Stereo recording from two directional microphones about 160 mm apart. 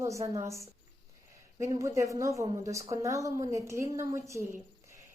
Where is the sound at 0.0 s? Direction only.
20° right (ahead or behind).